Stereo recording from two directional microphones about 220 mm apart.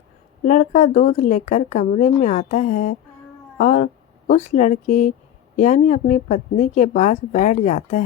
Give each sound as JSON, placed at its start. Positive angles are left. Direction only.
{"t": 0.4, "sound": "a woman's voice", "side_deg": 35}